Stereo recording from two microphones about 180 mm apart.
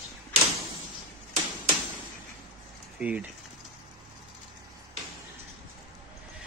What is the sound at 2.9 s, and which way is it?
Speech, 5° right (ahead or behind).